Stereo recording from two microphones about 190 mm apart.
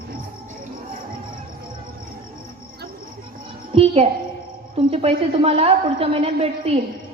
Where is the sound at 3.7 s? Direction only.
30° right (ahead or behind).